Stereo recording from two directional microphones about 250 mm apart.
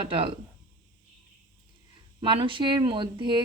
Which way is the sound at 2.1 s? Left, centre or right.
Right.